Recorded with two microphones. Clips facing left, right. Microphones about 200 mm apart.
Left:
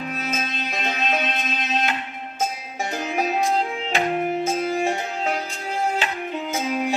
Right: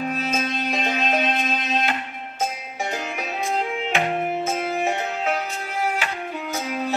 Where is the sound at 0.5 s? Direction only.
50° right (ahead or behind).